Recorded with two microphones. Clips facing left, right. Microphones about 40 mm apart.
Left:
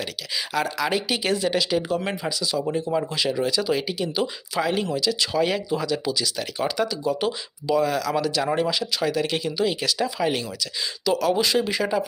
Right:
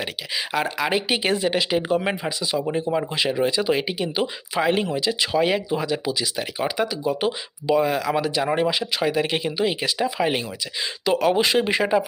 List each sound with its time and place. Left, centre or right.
0.0 s speech: right